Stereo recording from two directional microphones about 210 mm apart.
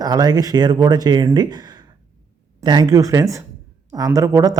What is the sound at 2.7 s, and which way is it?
Speech, 20° right (ahead or behind).